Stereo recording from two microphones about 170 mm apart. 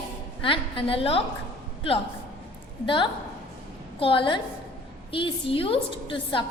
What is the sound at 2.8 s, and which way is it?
A woman's voice, 30° left (ahead or behind).